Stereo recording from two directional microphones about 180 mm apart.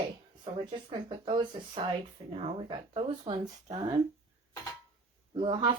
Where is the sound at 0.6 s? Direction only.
25° right (ahead or behind).